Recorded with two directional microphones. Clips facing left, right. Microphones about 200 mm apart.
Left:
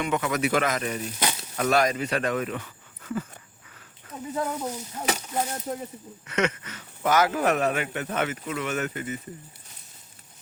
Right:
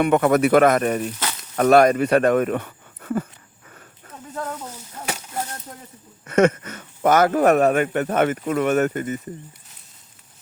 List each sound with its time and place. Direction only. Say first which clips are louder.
0.0 s a man's voice: right 9 dB; 55° right (ahead or behind)
4.4 s speech: left 2 dB; 10° left (ahead or behind)
6.2 s a man's voice: right 10 dB; 50° right (ahead or behind)